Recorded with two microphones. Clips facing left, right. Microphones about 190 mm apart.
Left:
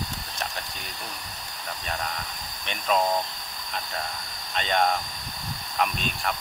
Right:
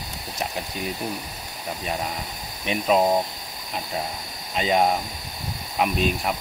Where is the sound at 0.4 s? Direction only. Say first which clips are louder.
Right 7 dB; 5° right (ahead or behind).